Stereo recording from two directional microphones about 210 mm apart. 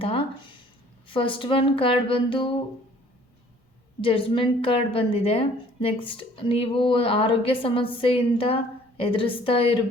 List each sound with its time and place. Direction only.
0.0 s a sound: 25° left (ahead or behind)
1.0 s a woman's voice: 25° left (ahead or behind)
4.0 s a woman's voice: 25° left (ahead or behind)